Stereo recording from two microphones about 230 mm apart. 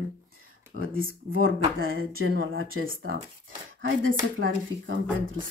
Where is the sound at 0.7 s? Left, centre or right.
Right.